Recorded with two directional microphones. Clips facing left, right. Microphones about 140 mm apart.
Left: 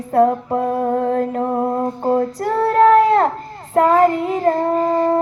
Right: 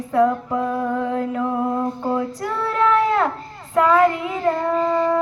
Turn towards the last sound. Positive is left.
turn(degrees=40)  # may be behind; listen again after turning